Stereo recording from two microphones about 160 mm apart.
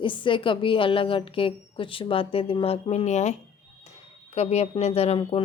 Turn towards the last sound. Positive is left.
turn(degrees=40)  # may be behind; listen again after turning